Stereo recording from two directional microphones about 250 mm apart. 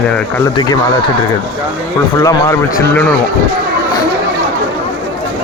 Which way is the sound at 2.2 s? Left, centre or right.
Centre.